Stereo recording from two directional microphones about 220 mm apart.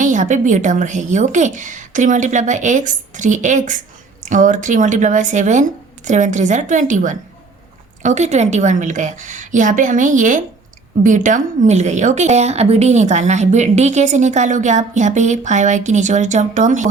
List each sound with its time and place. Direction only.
0.0 s a woman's voice: 35° right (ahead or behind)